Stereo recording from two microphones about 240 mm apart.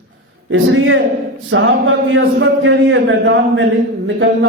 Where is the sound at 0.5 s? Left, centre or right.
Right.